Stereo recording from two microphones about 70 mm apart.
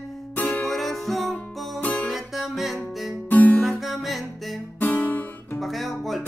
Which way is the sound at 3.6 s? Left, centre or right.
Centre.